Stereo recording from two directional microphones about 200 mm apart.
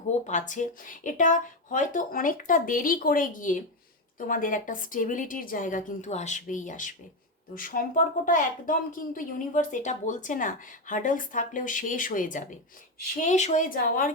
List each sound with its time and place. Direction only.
0.1 s a woman's voice: 40° left (ahead or behind)